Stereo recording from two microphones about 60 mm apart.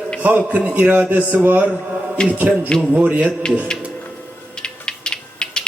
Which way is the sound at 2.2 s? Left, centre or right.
Centre.